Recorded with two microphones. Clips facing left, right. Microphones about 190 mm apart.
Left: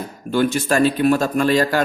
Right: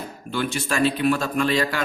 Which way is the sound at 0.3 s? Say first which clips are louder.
Left 8 dB; 40° left (ahead or behind).